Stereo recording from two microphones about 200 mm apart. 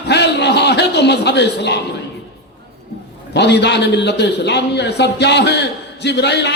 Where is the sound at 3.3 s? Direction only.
60° left (ahead or behind).